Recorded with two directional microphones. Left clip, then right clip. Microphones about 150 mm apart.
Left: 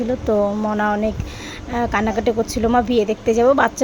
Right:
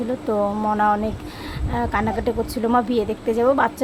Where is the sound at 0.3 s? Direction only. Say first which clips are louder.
Left 2 dB; 15° left (ahead or behind).